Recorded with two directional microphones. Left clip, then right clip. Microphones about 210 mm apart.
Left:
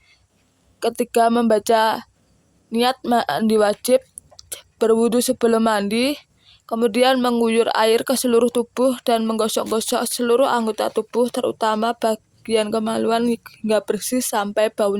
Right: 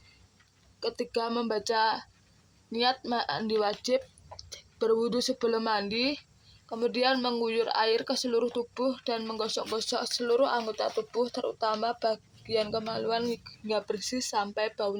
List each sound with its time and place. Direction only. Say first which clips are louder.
0.8 s speech: left 13 dB; 55° left (ahead or behind)